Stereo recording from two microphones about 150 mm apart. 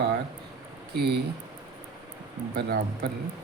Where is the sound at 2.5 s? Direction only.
90° right.